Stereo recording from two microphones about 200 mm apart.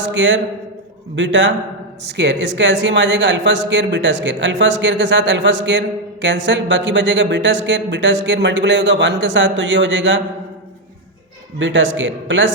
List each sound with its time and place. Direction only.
0.0 s speech: 65° right (ahead or behind)
11.6 s speech: 65° right (ahead or behind)